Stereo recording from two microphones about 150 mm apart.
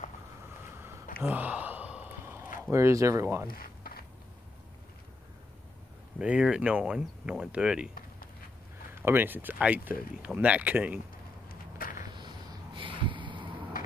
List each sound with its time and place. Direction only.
1.2 s gasp: 10° right (ahead or behind)
2.7 s speech: 20° right (ahead or behind)
3.5 s a sound: 80° left
6.1 s speech: 5° right (ahead or behind)
8.9 s speech: 15° right (ahead or behind)
12.1 s a sound: 30° right (ahead or behind)